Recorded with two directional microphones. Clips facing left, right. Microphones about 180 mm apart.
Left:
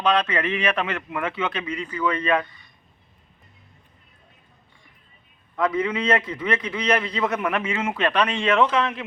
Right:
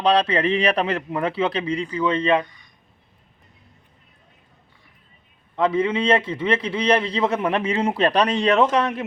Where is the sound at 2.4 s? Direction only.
15° right (ahead or behind).